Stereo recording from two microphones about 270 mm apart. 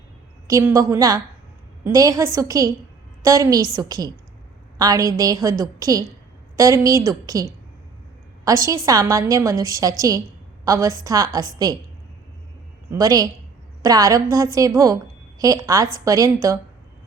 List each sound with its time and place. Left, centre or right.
0.4 s a woman's voice: centre
8.4 s a woman's voice: centre
12.9 s a woman's voice: centre